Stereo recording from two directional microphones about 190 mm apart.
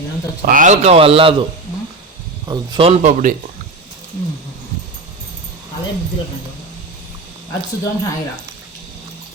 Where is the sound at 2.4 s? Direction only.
20° right (ahead or behind); by 3.3 s 40° right (ahead or behind).